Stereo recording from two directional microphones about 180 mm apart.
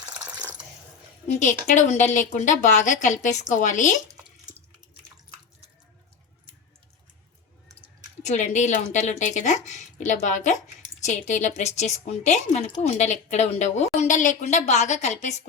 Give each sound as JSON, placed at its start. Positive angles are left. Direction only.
{"t": 1.3, "sound": "speech", "side_deg": 45}
{"t": 8.2, "sound": "a woman's voice", "side_deg": 40}